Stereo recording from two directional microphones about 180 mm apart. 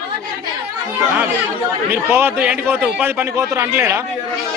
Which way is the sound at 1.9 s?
10° right (ahead or behind).